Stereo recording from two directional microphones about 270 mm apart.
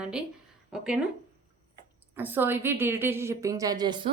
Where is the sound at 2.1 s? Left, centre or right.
Centre.